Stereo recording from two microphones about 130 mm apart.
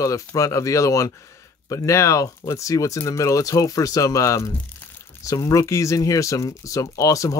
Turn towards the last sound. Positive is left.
turn(degrees=25)  # may be behind; listen again after turning